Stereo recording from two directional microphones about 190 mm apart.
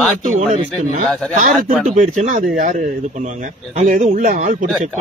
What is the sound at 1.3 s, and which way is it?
Speech, 45° right (ahead or behind).